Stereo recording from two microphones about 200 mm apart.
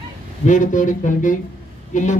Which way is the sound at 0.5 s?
40° left (ahead or behind).